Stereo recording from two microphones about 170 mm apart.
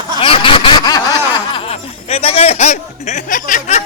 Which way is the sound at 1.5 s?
35° left (ahead or behind).